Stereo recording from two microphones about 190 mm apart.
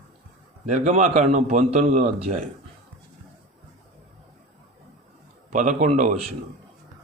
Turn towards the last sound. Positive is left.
turn(degrees=-40)  # may be behind; listen again after turning